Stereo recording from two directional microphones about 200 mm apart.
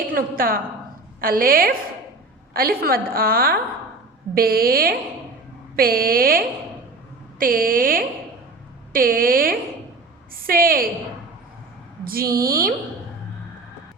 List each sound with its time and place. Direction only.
0.1 s a woman's voice: 45° right (ahead or behind)
12.0 s a woman's voice: 45° right (ahead or behind)